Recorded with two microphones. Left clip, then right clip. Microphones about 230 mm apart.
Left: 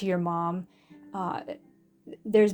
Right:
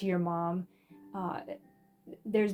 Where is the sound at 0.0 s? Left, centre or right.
Left.